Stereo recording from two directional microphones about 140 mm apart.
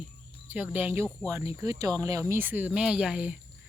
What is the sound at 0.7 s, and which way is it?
Speech, 15° right (ahead or behind).